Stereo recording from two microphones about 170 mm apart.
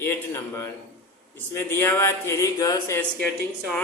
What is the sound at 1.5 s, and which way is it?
A man's voice, 15° left (ahead or behind).